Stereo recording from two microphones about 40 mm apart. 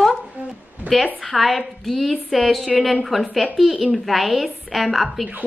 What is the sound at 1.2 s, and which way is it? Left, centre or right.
A woman's voice, centre.